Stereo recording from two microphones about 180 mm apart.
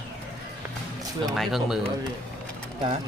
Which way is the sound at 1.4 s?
Centre (ahead or behind).